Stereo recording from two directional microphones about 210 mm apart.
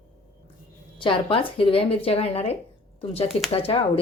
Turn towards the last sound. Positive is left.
turn(degrees=25)  # may be behind; listen again after turning